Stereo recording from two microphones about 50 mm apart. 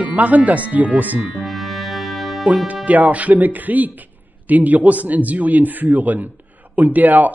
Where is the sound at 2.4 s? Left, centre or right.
Right.